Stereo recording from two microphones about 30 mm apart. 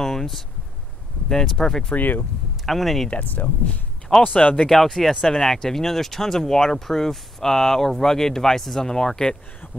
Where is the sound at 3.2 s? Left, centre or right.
Left.